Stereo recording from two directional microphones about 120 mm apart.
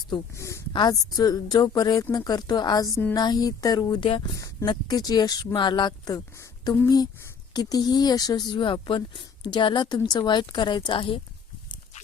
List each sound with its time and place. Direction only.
0.3 s speech: 25° left (ahead or behind)
0.7 s speech: 35° left (ahead or behind)
4.4 s speech: 30° left (ahead or behind)